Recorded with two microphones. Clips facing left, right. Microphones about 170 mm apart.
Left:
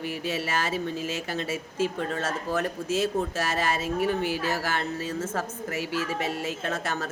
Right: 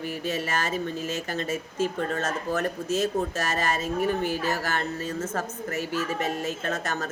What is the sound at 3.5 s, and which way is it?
Speech, 45° right (ahead or behind).